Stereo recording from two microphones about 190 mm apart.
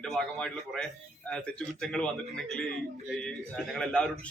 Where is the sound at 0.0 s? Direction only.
5° left (ahead or behind).